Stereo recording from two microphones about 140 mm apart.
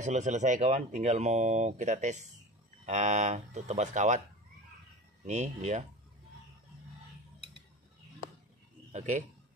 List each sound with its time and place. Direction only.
0.0 s speech: 60° right (ahead or behind)
5.2 s speech: 55° right (ahead or behind)
8.9 s speech: 55° right (ahead or behind)